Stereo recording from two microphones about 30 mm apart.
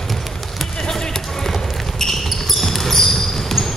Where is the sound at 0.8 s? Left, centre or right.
Centre.